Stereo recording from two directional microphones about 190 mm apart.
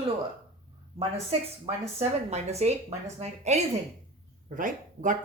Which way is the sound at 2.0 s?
35° right (ahead or behind).